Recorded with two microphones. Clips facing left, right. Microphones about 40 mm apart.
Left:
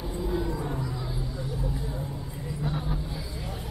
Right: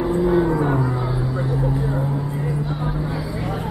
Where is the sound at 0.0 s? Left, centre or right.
Right.